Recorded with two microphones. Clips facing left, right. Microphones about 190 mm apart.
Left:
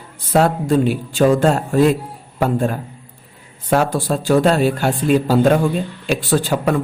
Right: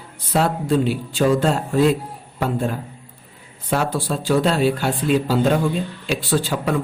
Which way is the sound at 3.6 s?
45° left (ahead or behind).